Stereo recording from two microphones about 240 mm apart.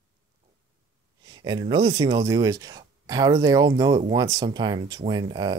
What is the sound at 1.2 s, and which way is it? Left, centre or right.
Speech, centre.